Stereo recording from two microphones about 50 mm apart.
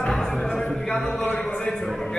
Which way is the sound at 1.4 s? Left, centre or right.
Centre.